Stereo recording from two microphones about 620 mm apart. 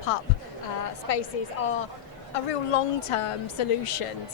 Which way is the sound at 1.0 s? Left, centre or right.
Left.